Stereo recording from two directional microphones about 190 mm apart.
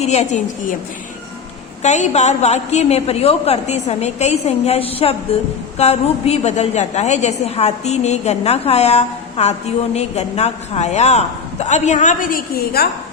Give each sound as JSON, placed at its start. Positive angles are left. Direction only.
{"t": 0.0, "sound": "a woman's voice", "side_deg": 35}
{"t": 1.8, "sound": "a woman's voice", "side_deg": 35}